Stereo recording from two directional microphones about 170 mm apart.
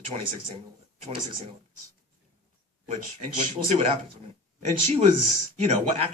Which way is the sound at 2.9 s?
40° right (ahead or behind).